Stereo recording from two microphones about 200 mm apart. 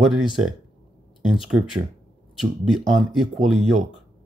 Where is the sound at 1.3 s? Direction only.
Centre (ahead or behind).